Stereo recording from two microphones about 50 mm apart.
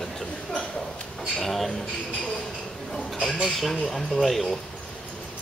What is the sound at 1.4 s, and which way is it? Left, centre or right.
Speech, centre.